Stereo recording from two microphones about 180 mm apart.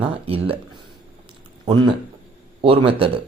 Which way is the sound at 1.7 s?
25° right (ahead or behind).